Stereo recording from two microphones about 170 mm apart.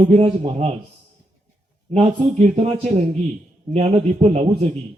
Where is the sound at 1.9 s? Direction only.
40° right (ahead or behind).